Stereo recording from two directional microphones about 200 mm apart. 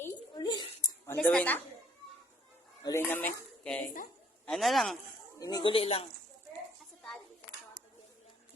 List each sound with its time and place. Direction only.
0.0 s a sound: 20° left (ahead or behind)
1.0 s a woman's voice: 10° left (ahead or behind)
2.8 s a man's voice: 10° left (ahead or behind)
5.4 s speech: 20° left (ahead or behind)